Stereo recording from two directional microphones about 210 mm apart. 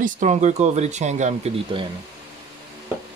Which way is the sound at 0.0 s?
35° right (ahead or behind).